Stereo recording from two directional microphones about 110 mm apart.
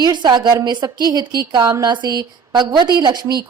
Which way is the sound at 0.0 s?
40° right (ahead or behind).